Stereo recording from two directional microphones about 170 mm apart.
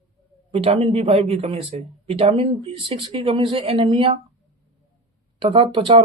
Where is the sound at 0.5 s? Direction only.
35° right (ahead or behind).